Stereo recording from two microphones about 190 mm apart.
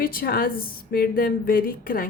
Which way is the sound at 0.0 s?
50° left (ahead or behind).